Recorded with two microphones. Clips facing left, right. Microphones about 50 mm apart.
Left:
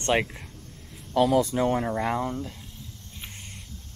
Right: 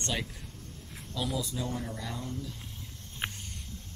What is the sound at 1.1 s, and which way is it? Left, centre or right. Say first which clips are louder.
Speech: left 13 dB; left.